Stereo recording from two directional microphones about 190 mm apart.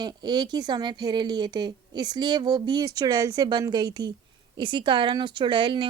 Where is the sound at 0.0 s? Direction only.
20° right (ahead or behind).